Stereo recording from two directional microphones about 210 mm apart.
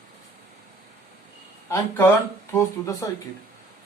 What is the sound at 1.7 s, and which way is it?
Speech, 10° left (ahead or behind).